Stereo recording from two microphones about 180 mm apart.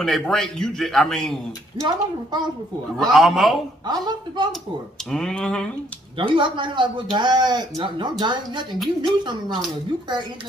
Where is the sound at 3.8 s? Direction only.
25° right (ahead or behind).